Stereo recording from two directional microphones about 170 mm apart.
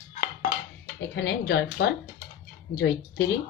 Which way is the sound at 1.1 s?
90° left.